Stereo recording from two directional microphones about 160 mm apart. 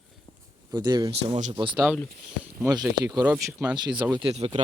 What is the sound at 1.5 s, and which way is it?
Speech, 30° right (ahead or behind).